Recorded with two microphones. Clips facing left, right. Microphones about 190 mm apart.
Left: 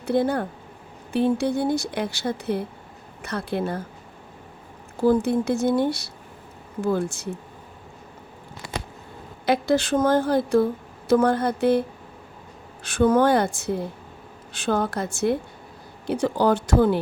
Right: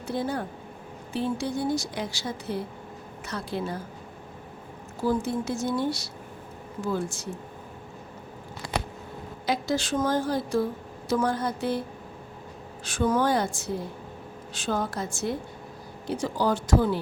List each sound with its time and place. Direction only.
0.1 s speech: 60° left (ahead or behind)
5.0 s speech: 60° left (ahead or behind)
9.5 s speech: 60° left (ahead or behind)
12.8 s speech: 60° left (ahead or behind)